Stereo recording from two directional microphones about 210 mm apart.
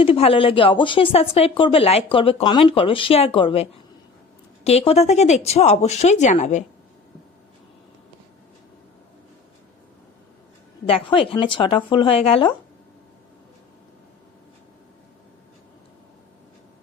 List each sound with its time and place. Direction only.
0.0 s speech: 25° left (ahead or behind)
10.8 s speech: 25° left (ahead or behind)